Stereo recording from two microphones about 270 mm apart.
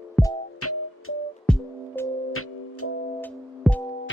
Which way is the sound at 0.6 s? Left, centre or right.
Left.